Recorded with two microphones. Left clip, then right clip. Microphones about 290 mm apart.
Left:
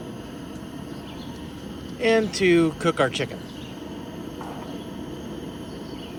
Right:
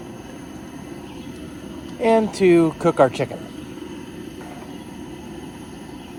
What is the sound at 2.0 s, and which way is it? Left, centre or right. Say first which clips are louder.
Speech: right 4 dB; centre.